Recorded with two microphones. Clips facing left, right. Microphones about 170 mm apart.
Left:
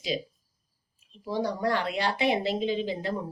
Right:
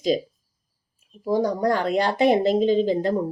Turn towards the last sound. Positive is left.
turn(degrees=-45)  # may be behind; listen again after turning